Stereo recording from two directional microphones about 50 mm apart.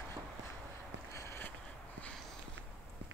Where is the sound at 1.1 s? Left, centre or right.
Left.